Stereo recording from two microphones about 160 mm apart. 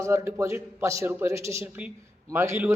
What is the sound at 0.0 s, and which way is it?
A man's voice, 20° right (ahead or behind).